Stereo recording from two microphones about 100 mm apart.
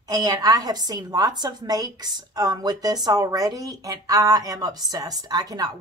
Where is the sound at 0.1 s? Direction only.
40° right (ahead or behind).